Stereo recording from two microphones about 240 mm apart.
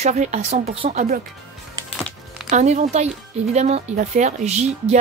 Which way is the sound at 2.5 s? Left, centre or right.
Right.